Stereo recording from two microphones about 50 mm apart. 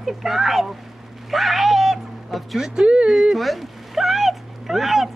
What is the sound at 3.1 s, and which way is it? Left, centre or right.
Speech, centre.